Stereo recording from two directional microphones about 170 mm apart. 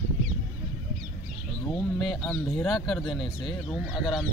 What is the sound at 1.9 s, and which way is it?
Speech, centre (ahead or behind).